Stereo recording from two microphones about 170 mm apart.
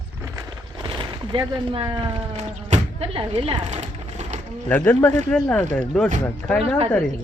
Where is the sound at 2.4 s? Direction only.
35° right (ahead or behind).